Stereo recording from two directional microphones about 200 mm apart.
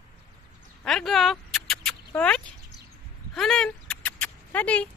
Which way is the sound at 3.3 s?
Centre (ahead or behind).